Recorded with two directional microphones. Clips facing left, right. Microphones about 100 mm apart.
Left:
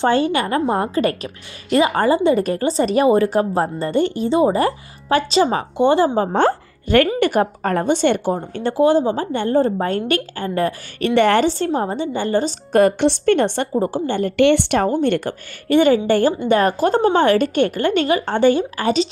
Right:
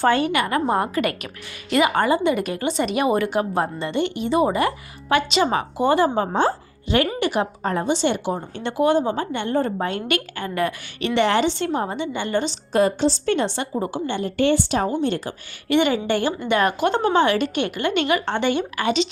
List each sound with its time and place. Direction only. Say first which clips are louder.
0.0 s a woman's voice: left 2 dB; 30° left (ahead or behind)
6.3 s speech: left 4 dB; 60° left (ahead or behind)
8.5 s a woman's voice: left 4 dB; 35° left (ahead or behind)
12.7 s a woman's voice: left 4 dB; 60° left (ahead or behind)
14.3 s a woman's voice: left 5 dB; 70° left (ahead or behind)
15.7 s a woman's voice: left 5 dB; 40° left (ahead or behind)